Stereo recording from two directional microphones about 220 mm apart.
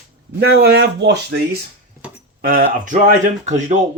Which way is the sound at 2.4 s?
40° right (ahead or behind).